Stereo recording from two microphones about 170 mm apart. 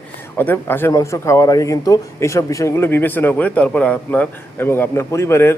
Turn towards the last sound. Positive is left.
turn(degrees=15)  # may be behind; listen again after turning